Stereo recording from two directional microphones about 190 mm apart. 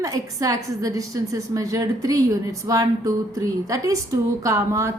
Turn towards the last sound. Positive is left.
turn(degrees=-15)  # may be behind; listen again after turning